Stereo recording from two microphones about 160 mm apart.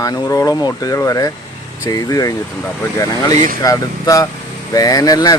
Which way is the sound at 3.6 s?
20° left (ahead or behind).